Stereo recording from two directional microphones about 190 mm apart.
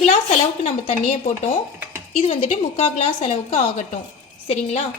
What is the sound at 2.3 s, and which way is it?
A woman's voice, 30° left (ahead or behind).